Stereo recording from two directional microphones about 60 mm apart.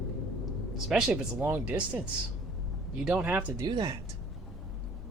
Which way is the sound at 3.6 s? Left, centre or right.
Right.